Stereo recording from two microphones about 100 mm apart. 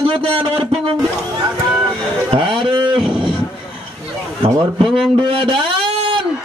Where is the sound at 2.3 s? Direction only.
60° right (ahead or behind).